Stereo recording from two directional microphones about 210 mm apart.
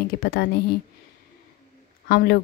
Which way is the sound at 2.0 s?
50° left (ahead or behind).